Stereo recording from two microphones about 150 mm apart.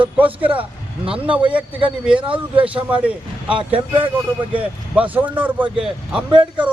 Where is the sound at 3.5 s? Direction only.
35° right (ahead or behind).